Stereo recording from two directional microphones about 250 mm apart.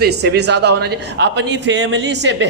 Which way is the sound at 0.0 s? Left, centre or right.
Right.